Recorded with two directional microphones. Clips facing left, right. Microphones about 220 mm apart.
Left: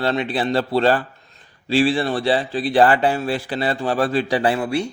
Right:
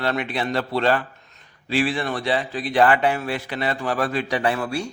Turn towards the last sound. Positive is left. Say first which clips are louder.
# left 4 dB
turn(degrees=20)  # may be behind; listen again after turning